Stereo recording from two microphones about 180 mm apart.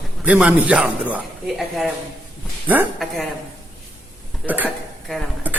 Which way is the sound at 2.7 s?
10° right (ahead or behind).